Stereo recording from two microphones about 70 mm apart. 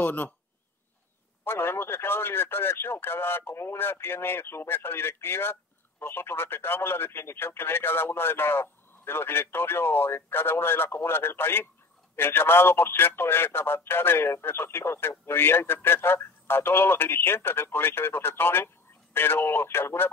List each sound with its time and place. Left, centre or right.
0.0 s speech: left
1.4 s speech: left